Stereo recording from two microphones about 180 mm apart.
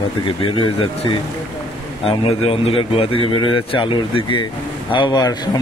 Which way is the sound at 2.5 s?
30° left (ahead or behind).